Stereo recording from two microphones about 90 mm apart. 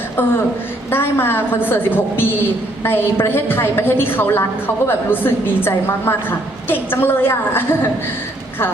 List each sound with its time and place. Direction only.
0.9 s a woman's voice: 25° left (ahead or behind)